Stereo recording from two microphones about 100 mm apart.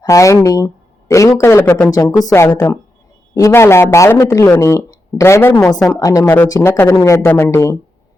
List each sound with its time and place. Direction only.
0.1 s speech: 30° left (ahead or behind)
1.9 s speech: 35° left (ahead or behind)
2.3 s speech: 25° left (ahead or behind)